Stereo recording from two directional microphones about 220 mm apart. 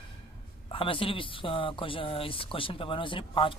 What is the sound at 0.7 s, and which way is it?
Speech, 25° left (ahead or behind).